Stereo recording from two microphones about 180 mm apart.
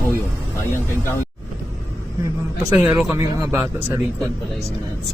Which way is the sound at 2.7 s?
10° right (ahead or behind).